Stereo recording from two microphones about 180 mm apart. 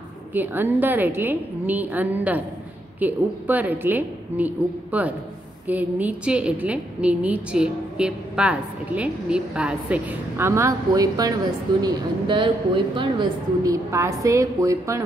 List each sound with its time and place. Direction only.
0.3 s a woman's voice: 10° right (ahead or behind)